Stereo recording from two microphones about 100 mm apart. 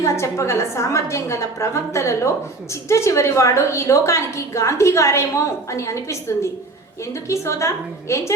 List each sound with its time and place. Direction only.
0.0 s a woman's voice: 30° left (ahead or behind)